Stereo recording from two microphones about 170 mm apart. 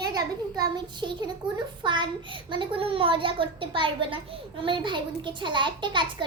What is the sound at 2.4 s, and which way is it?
A woman's voice, 30° right (ahead or behind).